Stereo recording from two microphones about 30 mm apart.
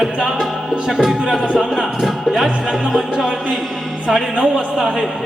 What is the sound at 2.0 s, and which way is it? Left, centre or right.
Speech, centre.